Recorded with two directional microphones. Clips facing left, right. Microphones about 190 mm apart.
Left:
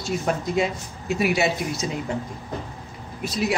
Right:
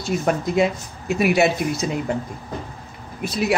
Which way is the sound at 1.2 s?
60° right (ahead or behind).